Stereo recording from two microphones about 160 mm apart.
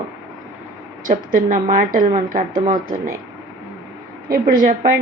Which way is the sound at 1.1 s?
55° right (ahead or behind).